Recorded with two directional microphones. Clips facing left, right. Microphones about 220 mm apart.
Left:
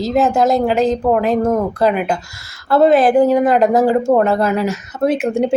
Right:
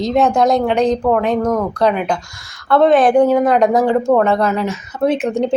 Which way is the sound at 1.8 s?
5° left (ahead or behind).